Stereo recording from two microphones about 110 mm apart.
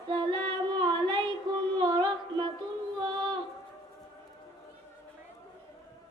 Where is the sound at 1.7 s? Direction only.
45° right (ahead or behind).